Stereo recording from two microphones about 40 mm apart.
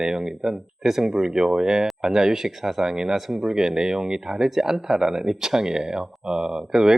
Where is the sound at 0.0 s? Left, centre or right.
Centre.